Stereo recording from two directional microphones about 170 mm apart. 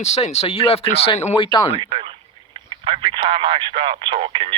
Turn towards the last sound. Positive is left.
turn(degrees=-30)  # may be behind; listen again after turning